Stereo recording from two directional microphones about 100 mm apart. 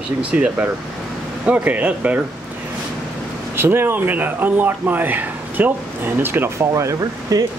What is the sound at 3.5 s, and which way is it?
Speech, 25° right (ahead or behind).